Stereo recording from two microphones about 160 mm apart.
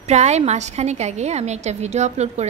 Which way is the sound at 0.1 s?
45° right (ahead or behind).